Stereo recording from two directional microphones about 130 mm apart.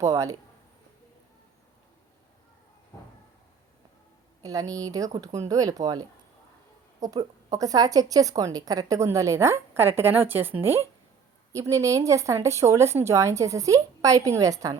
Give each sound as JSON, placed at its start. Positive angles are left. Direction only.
{"t": 0.0, "sound": "a woman's voice", "side_deg": -25}
{"t": 4.4, "sound": "a woman's voice", "side_deg": -30}
{"t": 11.5, "sound": "a woman's voice", "side_deg": -25}